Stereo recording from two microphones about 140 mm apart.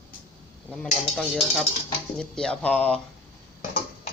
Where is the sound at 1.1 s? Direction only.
Centre (ahead or behind).